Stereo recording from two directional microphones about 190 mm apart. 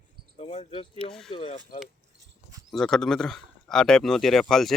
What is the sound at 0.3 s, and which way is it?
Speech, 35° left (ahead or behind).